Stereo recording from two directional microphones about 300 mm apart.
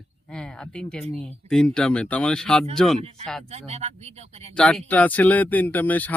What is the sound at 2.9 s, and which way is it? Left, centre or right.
Speech, right.